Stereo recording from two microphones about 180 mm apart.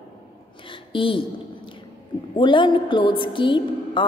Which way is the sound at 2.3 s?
25° left (ahead or behind).